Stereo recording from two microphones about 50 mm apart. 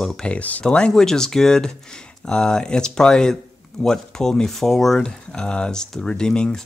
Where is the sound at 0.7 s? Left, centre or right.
Centre.